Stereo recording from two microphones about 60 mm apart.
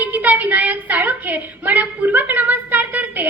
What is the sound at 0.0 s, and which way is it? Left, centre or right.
A woman's voice, right.